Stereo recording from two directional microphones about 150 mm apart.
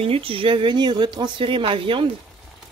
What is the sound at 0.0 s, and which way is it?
Speech, 40° right (ahead or behind).